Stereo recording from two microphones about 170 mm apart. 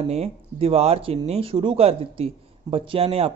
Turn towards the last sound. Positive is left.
turn(degrees=-35)  # may be behind; listen again after turning